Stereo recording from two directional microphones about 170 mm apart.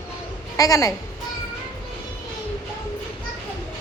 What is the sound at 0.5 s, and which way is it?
Speech, 20° left (ahead or behind).